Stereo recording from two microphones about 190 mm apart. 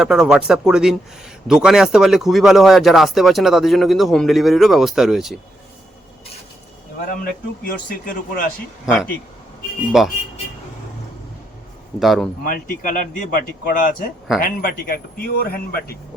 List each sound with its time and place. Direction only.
0.0 s speech: 5° right (ahead or behind)
7.2 s speech: 50° left (ahead or behind)
9.9 s speech: centre (ahead or behind)
11.9 s speech: centre (ahead or behind)
12.5 s speech: 45° left (ahead or behind)